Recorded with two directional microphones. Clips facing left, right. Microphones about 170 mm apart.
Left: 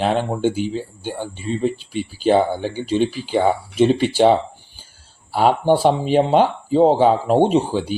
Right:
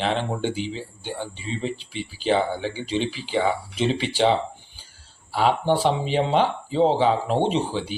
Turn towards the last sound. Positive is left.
turn(degrees=45)  # may be behind; listen again after turning